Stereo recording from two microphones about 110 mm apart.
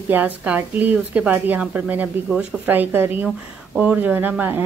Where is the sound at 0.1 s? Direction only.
15° right (ahead or behind).